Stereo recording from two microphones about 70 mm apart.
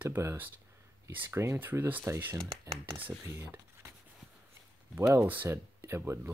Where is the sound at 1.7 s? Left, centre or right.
Right.